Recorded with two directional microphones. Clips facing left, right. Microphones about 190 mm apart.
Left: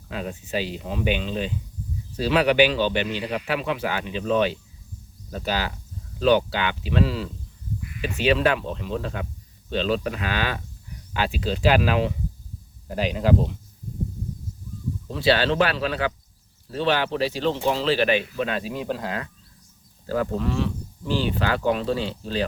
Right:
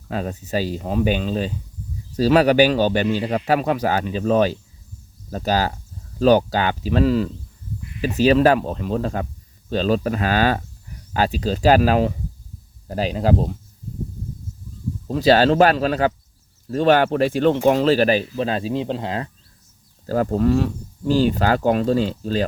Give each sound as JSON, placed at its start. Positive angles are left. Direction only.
{"t": 0.1, "sound": "speech", "side_deg": -40}
{"t": 15.0, "sound": "speech", "side_deg": -40}
{"t": 20.1, "sound": "speech", "side_deg": -40}